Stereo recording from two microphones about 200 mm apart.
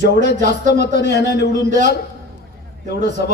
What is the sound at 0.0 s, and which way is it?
A man's voice, 55° left (ahead or behind).